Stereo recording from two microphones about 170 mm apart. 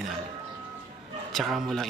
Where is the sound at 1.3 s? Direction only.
Centre (ahead or behind).